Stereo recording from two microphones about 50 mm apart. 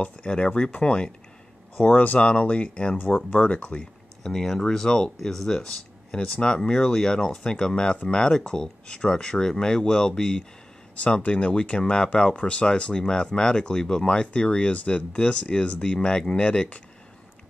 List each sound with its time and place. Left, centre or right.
0.0 s speech: centre
1.8 s speech: left
4.2 s speech: centre
6.1 s speech: left